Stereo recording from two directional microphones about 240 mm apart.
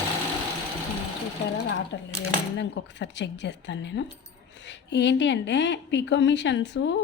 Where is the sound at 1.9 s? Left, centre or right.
Left.